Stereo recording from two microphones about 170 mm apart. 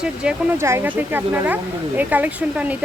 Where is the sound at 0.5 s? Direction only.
15° right (ahead or behind).